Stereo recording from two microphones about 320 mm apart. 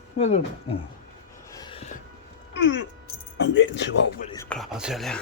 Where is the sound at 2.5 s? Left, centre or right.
Left.